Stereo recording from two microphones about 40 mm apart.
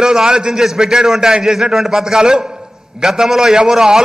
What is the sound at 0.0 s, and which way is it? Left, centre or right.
A man's voice, centre.